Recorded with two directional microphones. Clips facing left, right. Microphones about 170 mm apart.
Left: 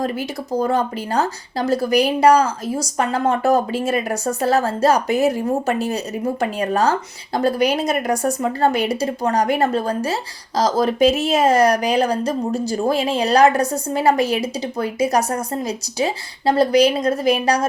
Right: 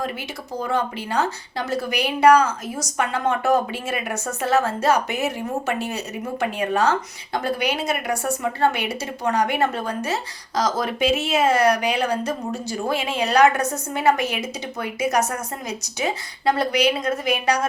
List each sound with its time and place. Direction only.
0.6 s speech: 40° left (ahead or behind)